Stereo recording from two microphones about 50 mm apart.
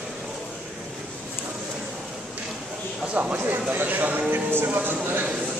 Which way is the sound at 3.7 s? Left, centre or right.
Right.